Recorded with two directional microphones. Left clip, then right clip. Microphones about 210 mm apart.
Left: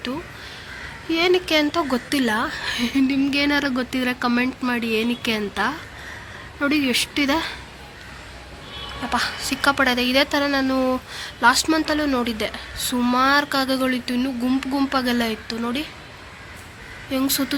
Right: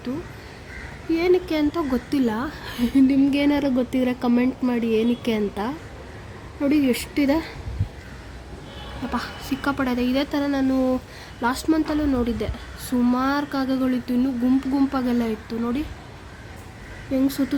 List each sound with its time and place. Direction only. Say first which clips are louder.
1.1 s a woman's voice: left 2 dB; centre (ahead or behind)
9.1 s a woman's voice: left 6 dB; 5° right (ahead or behind)
17.2 s a woman's voice: left 2 dB; 5° right (ahead or behind)